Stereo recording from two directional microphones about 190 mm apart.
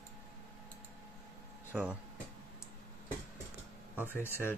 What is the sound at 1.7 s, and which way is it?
Speech, 10° right (ahead or behind).